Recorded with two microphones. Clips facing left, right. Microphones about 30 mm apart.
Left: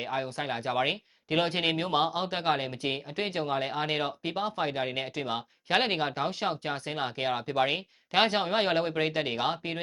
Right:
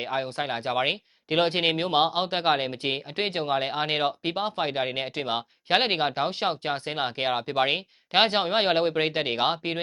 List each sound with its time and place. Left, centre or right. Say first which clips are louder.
0.0 s speech: right 3 dB; right
5.7 s speech: right 4 dB; right